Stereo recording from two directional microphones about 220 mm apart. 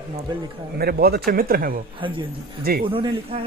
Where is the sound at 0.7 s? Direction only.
45° right (ahead or behind).